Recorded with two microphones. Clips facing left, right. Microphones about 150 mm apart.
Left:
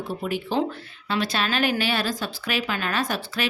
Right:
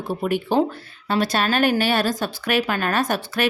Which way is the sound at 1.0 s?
40° right (ahead or behind).